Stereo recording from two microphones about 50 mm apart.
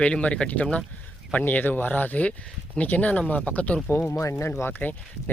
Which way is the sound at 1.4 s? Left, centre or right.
Left.